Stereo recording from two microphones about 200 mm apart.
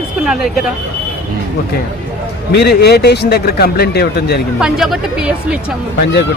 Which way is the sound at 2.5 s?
55° left (ahead or behind).